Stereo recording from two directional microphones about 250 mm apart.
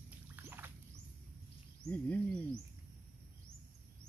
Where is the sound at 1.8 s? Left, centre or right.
Centre.